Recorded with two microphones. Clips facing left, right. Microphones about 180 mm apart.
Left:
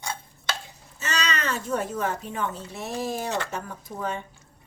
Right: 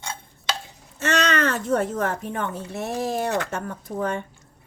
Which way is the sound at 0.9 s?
60° right (ahead or behind).